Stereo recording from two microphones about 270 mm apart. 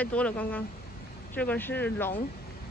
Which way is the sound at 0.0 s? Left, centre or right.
Centre.